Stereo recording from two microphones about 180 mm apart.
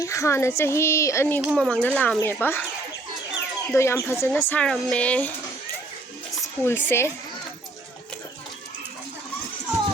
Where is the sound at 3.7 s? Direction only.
15° left (ahead or behind).